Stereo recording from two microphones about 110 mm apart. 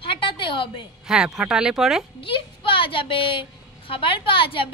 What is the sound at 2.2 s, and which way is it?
A woman's voice, 50° left (ahead or behind).